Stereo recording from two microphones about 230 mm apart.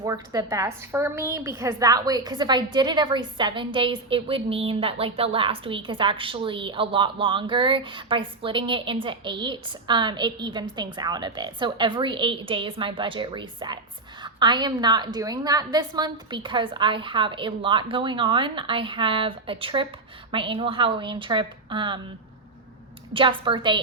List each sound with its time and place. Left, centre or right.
0.0 s a woman's voice: centre
23.1 s a woman's voice: right